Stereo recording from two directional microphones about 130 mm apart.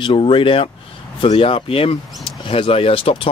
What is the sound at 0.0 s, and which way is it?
Speech, 40° left (ahead or behind).